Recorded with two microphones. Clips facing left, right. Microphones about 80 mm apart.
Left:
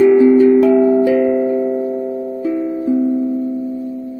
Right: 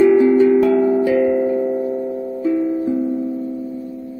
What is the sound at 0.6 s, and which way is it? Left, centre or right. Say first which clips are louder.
Music: left 3 dB; centre.